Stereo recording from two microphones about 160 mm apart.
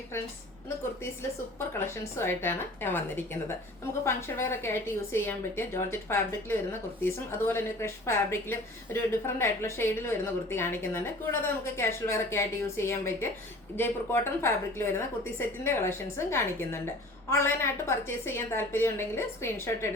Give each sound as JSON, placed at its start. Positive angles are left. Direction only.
{"t": 2.1, "sound": "a woman's voice", "side_deg": 15}